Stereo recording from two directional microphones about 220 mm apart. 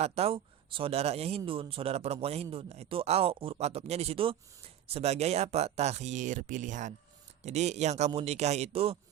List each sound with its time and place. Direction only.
0.0 s speech: 25° right (ahead or behind)